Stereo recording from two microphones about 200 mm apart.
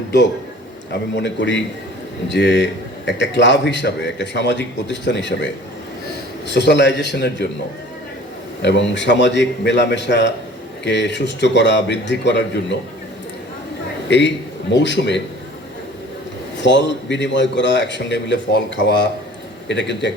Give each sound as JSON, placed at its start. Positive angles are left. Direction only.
{"t": 1.1, "sound": "a man's voice", "side_deg": 65}
{"t": 6.5, "sound": "a man's voice", "side_deg": 60}
{"t": 8.6, "sound": "a man's voice", "side_deg": 65}
{"t": 14.1, "sound": "a man's voice", "side_deg": 60}
{"t": 16.6, "sound": "a man's voice", "side_deg": 65}